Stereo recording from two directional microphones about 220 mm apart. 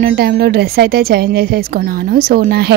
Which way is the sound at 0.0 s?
45° right (ahead or behind).